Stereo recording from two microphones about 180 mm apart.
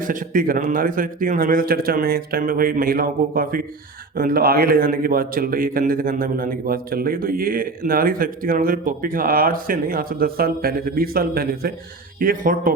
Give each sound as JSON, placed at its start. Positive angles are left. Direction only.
{"t": 0.1, "sound": "a man's voice", "side_deg": -50}